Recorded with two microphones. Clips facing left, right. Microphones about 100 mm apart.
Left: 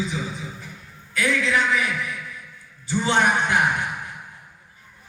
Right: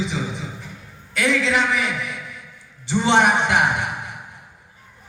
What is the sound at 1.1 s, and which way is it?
Speech, 75° right (ahead or behind).